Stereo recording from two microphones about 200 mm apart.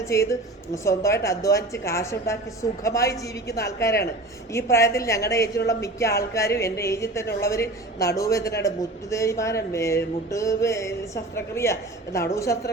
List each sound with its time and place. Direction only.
0.0 s a woman's voice: 15° left (ahead or behind)